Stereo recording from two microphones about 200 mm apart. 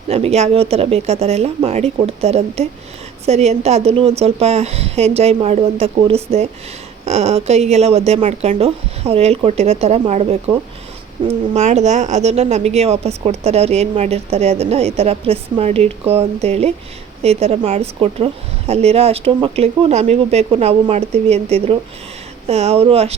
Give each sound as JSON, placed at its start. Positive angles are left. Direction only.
{"t": 0.1, "sound": "speech", "side_deg": -30}